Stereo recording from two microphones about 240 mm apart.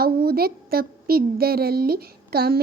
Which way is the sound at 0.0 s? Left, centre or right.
Right.